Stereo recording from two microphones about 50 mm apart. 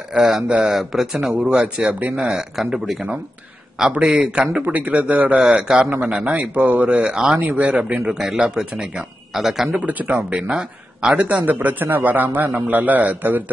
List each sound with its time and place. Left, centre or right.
0.1 s a man's voice: centre
1.5 s a man's voice: right
4.6 s a man's voice: right
5.4 s a man's voice: centre
7.3 s a man's voice: right
7.9 s a man's voice: centre
9.8 s a man's voice: right
10.5 s speech: centre
11.4 s a man's voice: right